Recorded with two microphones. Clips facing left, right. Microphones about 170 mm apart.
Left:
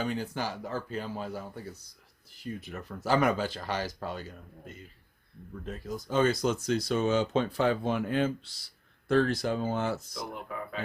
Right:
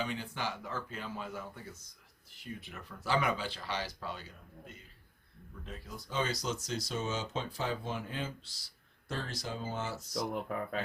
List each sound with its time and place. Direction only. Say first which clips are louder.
0.0 s speech: left 5 dB; 40° left (ahead or behind); by 10.0 s 60° left (ahead or behind)
10.5 s speech: right 2 dB; 45° right (ahead or behind)